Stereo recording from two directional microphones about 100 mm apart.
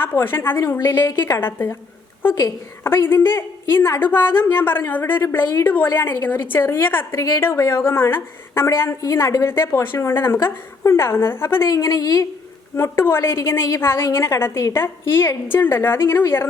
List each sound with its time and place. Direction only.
0.0 s a woman's voice: 20° left (ahead or behind)
2.3 s a woman's voice: 35° left (ahead or behind)
2.9 s a woman's voice: 20° left (ahead or behind)
12.7 s a woman's voice: 25° left (ahead or behind)